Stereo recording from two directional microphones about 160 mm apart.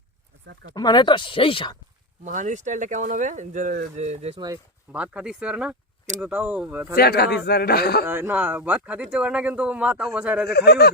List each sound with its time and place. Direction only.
0.7 s speech: 25° left (ahead or behind)
2.2 s speech: 50° right (ahead or behind)
4.4 s speech: 25° right (ahead or behind)
4.9 s speech: 5° right (ahead or behind)
6.9 s a man's voice: 85° left
7.4 s speech: 75° left (ahead or behind)
8.0 s speech: 15° right (ahead or behind)
10.5 s speech: 85° left